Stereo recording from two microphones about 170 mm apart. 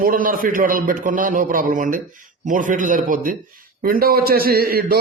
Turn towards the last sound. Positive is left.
turn(degrees=-60)  # may be behind; listen again after turning